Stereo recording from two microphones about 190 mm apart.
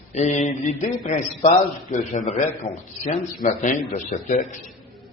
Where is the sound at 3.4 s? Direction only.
40° left (ahead or behind).